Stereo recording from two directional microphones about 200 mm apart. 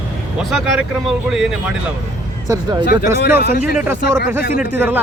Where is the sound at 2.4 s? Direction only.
15° right (ahead or behind).